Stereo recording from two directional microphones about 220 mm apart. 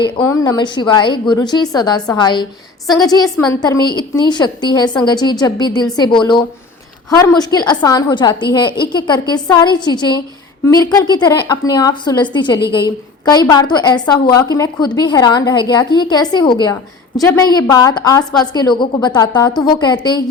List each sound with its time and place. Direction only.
0.0 s a woman's voice: 15° left (ahead or behind)